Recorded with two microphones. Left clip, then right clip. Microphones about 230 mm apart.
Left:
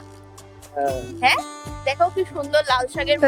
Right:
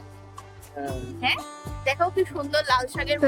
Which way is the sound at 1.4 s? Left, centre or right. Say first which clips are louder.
Left 7 dB; centre.